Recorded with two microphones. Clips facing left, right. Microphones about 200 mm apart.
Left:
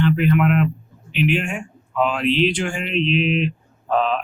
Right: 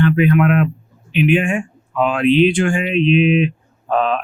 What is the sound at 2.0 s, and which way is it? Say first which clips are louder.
Speech: right 5 dB; 55° right (ahead or behind).